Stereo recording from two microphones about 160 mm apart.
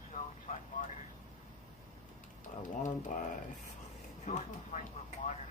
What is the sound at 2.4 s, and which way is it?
Speech, 50° left (ahead or behind).